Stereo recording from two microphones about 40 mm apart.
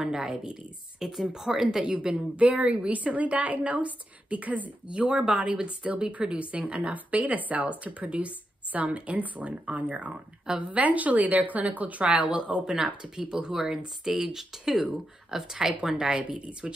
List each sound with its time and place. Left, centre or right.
0.0 s speech: centre
1.9 s a woman's voice: right
4.8 s a woman's voice: right
12.7 s speech: centre
16.3 s a woman's voice: right